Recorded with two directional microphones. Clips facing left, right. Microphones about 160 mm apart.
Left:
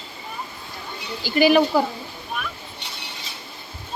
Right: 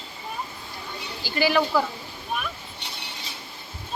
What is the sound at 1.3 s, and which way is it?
Speech, 15° left (ahead or behind).